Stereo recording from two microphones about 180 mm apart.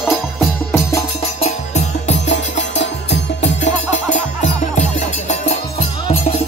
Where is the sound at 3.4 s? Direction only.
45° left (ahead or behind).